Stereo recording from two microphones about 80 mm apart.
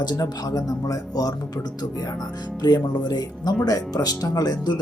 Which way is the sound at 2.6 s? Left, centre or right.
Left.